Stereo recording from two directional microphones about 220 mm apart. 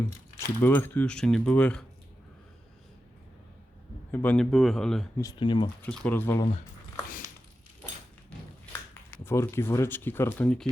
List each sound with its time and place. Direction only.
0.0 s speech: 10° left (ahead or behind)
4.1 s speech: 10° left (ahead or behind)
5.2 s speech: 20° left (ahead or behind)
5.8 s speech: 5° left (ahead or behind)
9.0 s speech: 10° left (ahead or behind)